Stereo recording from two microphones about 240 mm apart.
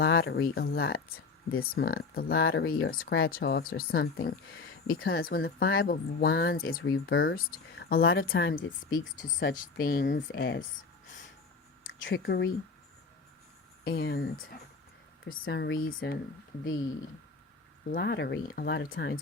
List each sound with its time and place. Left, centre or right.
0.0 s speech: left
10.2 s speech: left
12.0 s speech: left
13.8 s speech: left
15.4 s speech: left
17.9 s speech: left